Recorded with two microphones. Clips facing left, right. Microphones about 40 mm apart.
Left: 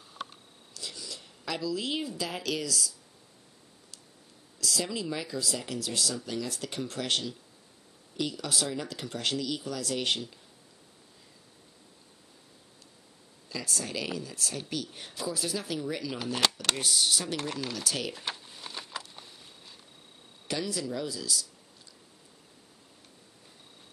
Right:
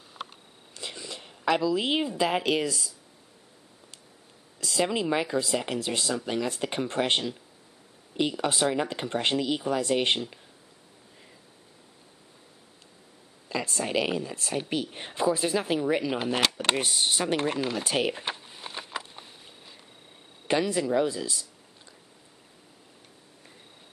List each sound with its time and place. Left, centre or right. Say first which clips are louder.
0.7 s a woman's voice: right 4 dB; right
4.6 s speech: right 6 dB; right
13.5 s speech: right 6 dB; right
16.5 s a sound: right 3 dB; right
20.4 s speech: right 8 dB; right